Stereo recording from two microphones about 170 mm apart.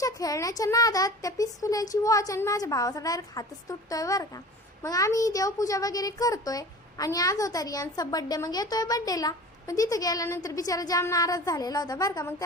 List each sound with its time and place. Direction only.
0.0 s speech: 20° left (ahead or behind)